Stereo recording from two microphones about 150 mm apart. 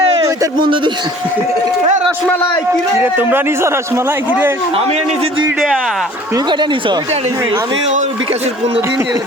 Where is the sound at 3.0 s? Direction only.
15° right (ahead or behind).